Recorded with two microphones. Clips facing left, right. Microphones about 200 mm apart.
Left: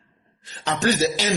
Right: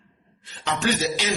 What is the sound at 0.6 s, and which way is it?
Speech, 40° left (ahead or behind).